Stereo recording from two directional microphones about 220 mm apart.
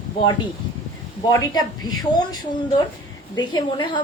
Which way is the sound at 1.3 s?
15° left (ahead or behind).